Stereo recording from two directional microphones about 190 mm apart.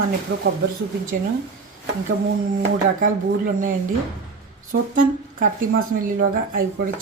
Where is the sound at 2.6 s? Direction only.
45° right (ahead or behind).